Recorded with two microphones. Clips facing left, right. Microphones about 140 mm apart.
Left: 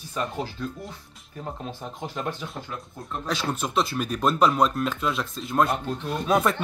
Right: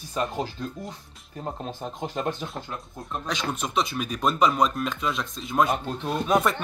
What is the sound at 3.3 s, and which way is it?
Speech, 5° left (ahead or behind).